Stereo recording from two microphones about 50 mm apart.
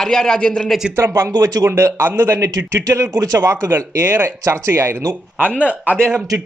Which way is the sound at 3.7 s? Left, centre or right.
Right.